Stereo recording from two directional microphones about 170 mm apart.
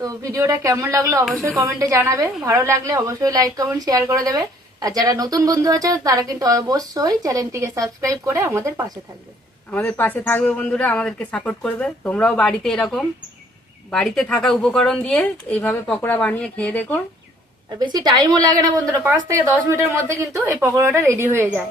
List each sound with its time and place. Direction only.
0.0 s speech: 20° right (ahead or behind)
1.2 s speech: centre (ahead or behind)
1.5 s speech: 20° right (ahead or behind)
9.7 s speech: 10° left (ahead or behind)
17.7 s a woman's voice: 25° right (ahead or behind)